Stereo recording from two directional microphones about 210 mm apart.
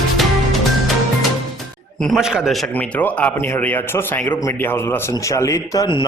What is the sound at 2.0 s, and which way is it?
A man's voice, centre (ahead or behind).